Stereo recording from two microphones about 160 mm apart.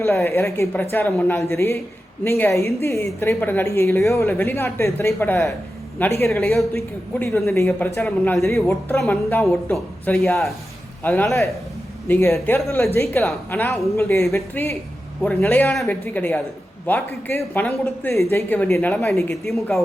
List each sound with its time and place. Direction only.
0.0 s a woman's voice: 15° left (ahead or behind)